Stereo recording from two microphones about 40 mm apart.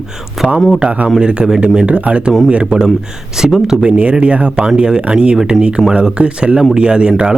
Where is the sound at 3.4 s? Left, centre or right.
Centre.